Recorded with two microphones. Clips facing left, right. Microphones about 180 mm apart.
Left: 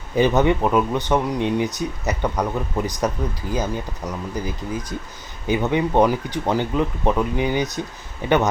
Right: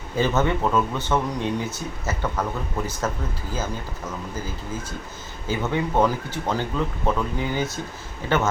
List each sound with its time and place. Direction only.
0.2 s a man's voice: 15° left (ahead or behind)